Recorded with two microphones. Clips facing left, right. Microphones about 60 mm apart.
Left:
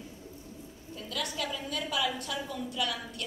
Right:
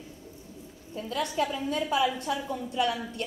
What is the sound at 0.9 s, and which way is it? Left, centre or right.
A woman's voice, right.